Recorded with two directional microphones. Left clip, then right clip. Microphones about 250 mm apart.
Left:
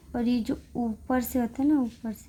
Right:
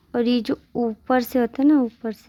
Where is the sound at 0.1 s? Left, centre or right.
Right.